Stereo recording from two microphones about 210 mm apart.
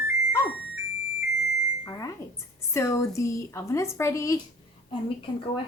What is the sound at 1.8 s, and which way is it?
A woman's voice, 15° left (ahead or behind).